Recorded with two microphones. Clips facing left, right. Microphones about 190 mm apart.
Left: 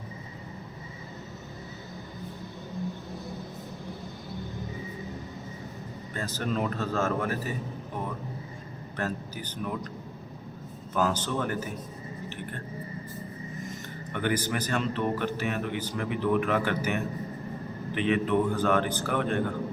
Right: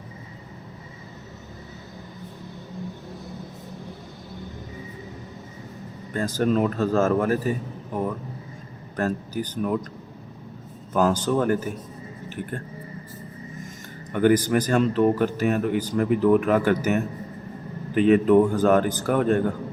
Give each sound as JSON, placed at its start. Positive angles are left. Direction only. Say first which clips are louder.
{"t": 6.1, "sound": "a man's voice", "louder": "right 8 dB", "side_deg": -45}
{"t": 9.0, "sound": "a man's voice", "louder": "right 7 dB", "side_deg": -45}
{"t": 10.9, "sound": "a man's voice", "louder": "right 7 dB", "side_deg": -45}
{"t": 14.1, "sound": "a man's voice", "louder": "right 10 dB", "side_deg": -45}